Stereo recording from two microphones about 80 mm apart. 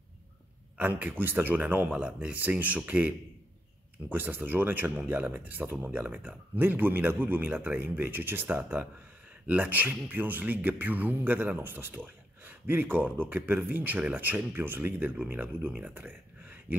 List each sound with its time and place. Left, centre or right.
0.7 s speech: right
4.1 s speech: right